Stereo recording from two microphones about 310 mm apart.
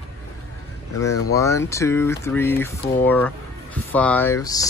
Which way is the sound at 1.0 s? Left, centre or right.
Centre.